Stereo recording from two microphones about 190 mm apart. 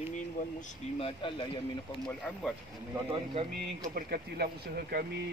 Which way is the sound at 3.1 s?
30° right (ahead or behind).